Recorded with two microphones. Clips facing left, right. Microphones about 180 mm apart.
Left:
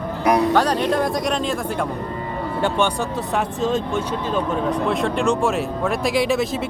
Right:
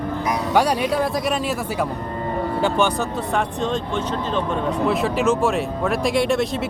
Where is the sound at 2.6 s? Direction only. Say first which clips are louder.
Even; 5° right (ahead or behind).